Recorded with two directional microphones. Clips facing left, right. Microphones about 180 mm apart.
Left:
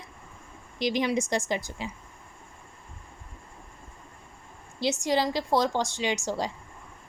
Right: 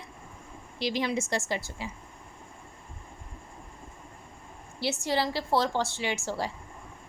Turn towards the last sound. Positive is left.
turn(degrees=15)  # may be behind; listen again after turning